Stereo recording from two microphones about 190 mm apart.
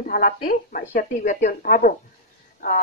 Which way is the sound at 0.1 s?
50° left (ahead or behind).